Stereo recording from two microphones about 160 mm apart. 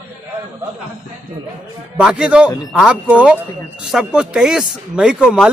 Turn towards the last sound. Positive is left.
turn(degrees=-5)  # may be behind; listen again after turning